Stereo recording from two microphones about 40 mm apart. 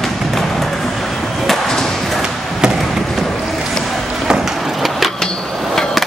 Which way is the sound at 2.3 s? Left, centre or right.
Centre.